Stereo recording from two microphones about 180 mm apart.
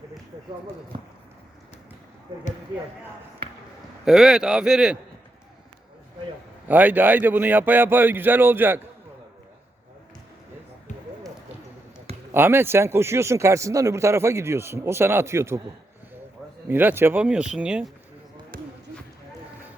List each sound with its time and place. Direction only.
2.3 s speech: 30° right (ahead or behind)
4.0 s a man's voice: 5° right (ahead or behind)
6.7 s speech: 10° right (ahead or behind)
12.3 s speech: 10° right (ahead or behind)
16.6 s speech: 10° right (ahead or behind)
18.5 s basketball bounce: 55° right (ahead or behind)